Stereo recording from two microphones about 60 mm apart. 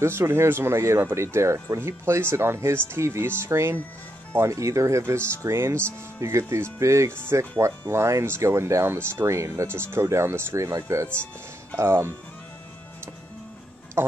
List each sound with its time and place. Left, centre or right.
0.0 s speech: right
11.8 s speech: right
14.0 s speech: right